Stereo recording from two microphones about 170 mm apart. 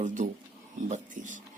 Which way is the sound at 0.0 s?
50° right (ahead or behind).